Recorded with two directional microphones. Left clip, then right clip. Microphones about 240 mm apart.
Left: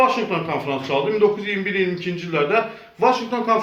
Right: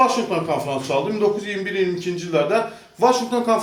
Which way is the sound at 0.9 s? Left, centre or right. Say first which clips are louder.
Even; right.